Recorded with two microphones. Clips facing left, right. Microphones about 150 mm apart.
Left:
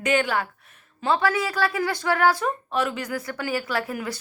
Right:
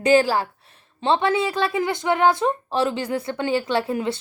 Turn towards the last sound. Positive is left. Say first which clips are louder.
# right 5 dB
turn(degrees=-25)  # may be behind; listen again after turning